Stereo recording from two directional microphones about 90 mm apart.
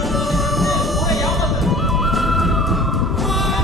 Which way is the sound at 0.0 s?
Centre (ahead or behind).